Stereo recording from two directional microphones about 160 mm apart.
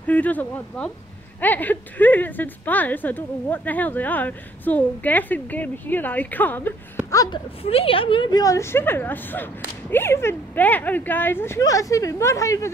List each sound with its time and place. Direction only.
0.0 s speech: 10° left (ahead or behind)
7.1 s speech: 20° left (ahead or behind)
7.6 s speech: 35° left (ahead or behind); by 12.7 s 20° left (ahead or behind)